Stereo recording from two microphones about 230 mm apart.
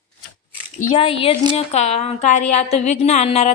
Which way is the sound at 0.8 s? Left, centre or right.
Left.